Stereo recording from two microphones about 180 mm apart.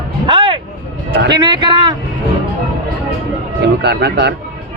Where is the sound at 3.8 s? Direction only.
65° right (ahead or behind).